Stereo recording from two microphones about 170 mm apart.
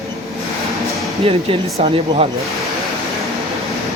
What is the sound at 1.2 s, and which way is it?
Speech, 35° right (ahead or behind).